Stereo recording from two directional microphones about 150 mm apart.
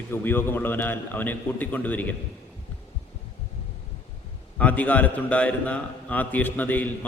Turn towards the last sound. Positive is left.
turn(degrees=10)  # may be behind; listen again after turning